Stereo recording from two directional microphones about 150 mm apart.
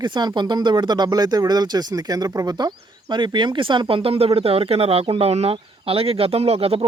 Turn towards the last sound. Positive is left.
turn(degrees=-40)  # may be behind; listen again after turning